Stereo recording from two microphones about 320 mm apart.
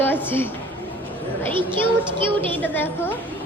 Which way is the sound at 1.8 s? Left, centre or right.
Centre.